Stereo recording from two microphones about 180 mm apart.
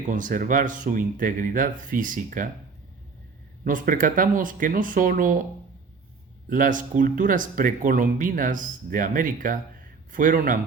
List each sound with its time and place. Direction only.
0.1 s speech: 50° right (ahead or behind)
3.6 s speech: 50° right (ahead or behind)
6.5 s speech: 45° right (ahead or behind)